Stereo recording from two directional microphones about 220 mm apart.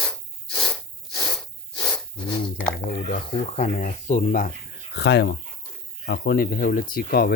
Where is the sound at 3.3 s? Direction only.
30° left (ahead or behind).